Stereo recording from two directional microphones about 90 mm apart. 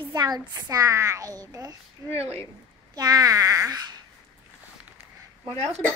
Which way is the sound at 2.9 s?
45° right (ahead or behind).